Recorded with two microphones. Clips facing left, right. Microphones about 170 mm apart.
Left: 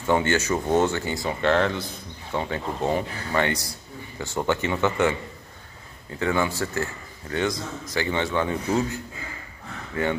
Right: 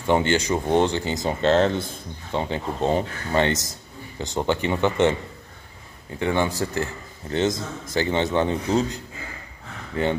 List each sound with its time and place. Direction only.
0.0 s a man's voice: 20° right (ahead or behind)
6.1 s a man's voice: 25° right (ahead or behind)